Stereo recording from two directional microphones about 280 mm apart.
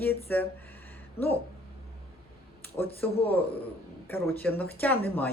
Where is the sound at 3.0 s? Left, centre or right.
Centre.